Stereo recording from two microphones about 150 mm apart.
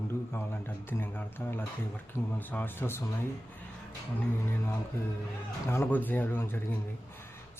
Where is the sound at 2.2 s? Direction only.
15° left (ahead or behind).